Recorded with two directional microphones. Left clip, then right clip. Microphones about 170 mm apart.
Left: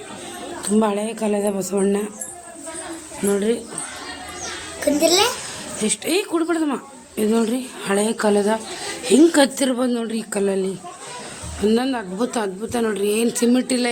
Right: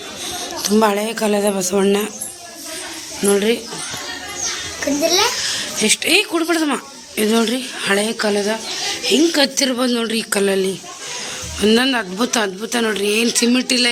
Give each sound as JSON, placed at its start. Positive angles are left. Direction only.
{"t": 0.6, "sound": "a woman's voice", "side_deg": -5}
{"t": 3.2, "sound": "a woman's voice", "side_deg": -15}
{"t": 5.5, "sound": "a woman's voice", "side_deg": 0}
{"t": 8.0, "sound": "a woman's voice", "side_deg": 25}
{"t": 9.0, "sound": "a woman's voice", "side_deg": 40}
{"t": 9.6, "sound": "speech", "side_deg": 5}